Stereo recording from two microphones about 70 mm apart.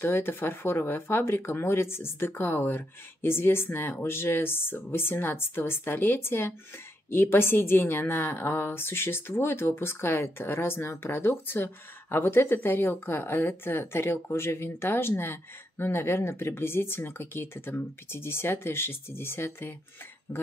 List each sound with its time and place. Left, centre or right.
0.0 s a woman's voice: left